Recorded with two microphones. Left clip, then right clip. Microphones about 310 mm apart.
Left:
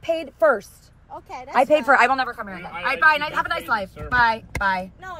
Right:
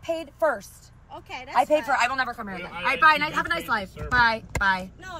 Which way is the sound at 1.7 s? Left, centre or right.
Left.